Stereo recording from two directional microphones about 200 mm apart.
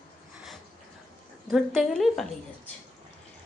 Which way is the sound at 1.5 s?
Centre (ahead or behind).